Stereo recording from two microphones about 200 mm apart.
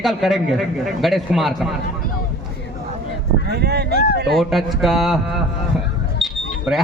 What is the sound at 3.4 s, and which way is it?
Speech, 55° right (ahead or behind).